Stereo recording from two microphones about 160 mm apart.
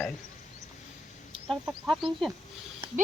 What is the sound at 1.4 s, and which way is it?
Speech, 5° left (ahead or behind).